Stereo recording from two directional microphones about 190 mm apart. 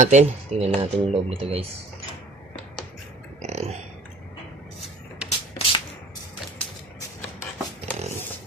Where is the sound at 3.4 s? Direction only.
35° right (ahead or behind).